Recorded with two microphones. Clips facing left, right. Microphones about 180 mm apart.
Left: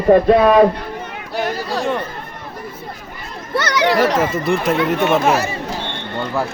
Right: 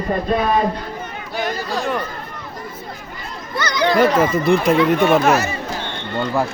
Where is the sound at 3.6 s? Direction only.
75° left (ahead or behind).